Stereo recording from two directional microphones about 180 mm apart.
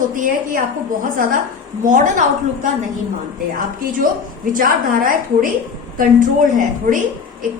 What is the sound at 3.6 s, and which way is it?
A woman's voice, 50° right (ahead or behind).